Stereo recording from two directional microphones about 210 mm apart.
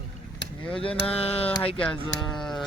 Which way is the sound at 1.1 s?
30° left (ahead or behind).